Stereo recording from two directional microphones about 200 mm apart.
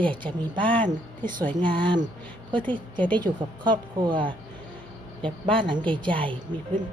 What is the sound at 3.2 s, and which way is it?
A woman's voice, 20° right (ahead or behind).